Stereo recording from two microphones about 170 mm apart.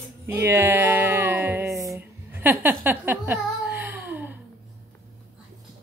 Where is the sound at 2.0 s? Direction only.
10° right (ahead or behind).